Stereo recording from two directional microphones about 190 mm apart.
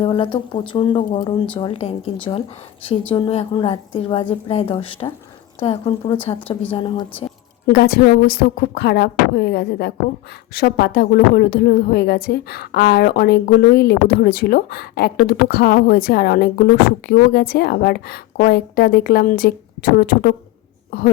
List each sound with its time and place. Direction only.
0.0 s a woman's voice: 30° left (ahead or behind)
3.1 s a woman's voice: 30° left (ahead or behind)
7.7 s a woman's voice: 55° left (ahead or behind)